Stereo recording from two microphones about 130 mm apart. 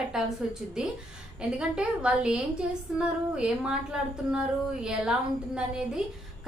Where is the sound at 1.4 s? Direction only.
5° right (ahead or behind).